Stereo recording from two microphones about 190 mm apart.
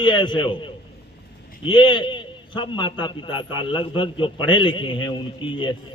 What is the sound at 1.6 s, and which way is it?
A man's voice, 25° left (ahead or behind).